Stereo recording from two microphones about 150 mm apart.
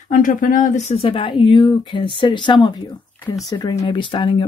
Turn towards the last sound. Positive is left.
turn(degrees=35)  # may be behind; listen again after turning